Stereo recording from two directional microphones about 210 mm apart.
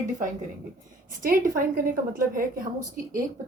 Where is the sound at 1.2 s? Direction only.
45° right (ahead or behind).